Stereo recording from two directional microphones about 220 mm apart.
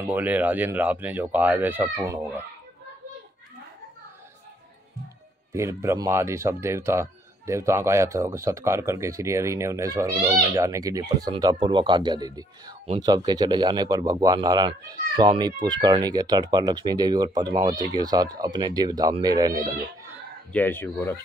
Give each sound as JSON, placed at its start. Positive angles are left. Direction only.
{"t": 0.0, "sound": "speech", "side_deg": -5}
{"t": 5.5, "sound": "speech", "side_deg": -10}
{"t": 20.5, "sound": "speech", "side_deg": 10}